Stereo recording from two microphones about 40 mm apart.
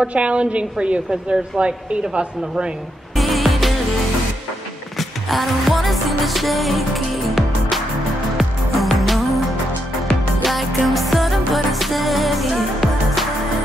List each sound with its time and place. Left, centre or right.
0.0 s a woman's voice: right
3.2 s music: centre
4.9 s music: centre
10.4 s music: centre